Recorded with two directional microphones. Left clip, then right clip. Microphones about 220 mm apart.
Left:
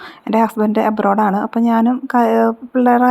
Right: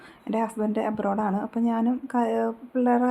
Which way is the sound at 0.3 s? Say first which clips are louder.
Left 12 dB; 30° left (ahead or behind).